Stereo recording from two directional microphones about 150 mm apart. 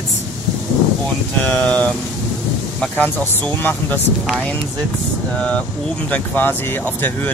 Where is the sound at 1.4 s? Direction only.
10° left (ahead or behind).